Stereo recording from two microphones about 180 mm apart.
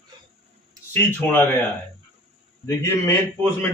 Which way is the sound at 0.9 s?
10° left (ahead or behind).